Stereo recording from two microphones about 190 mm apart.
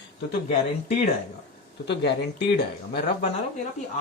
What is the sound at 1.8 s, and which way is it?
Speech, 65° left (ahead or behind).